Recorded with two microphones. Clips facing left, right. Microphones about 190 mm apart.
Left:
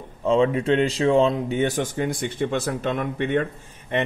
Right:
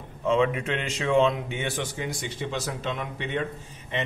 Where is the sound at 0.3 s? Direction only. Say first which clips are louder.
Left 5 dB; 35° left (ahead or behind).